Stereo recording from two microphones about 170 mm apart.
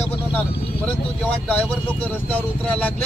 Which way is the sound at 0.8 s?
10° left (ahead or behind).